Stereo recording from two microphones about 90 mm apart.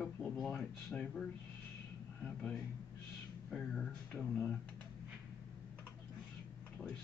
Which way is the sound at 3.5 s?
10° left (ahead or behind).